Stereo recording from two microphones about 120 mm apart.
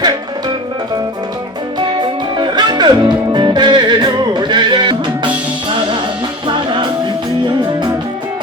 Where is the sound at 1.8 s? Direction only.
40° right (ahead or behind).